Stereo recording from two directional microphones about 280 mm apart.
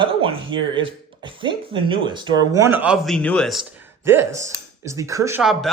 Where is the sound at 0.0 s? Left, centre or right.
Centre.